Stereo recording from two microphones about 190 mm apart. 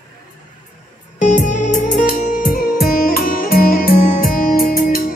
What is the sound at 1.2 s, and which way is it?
Music, 40° left (ahead or behind).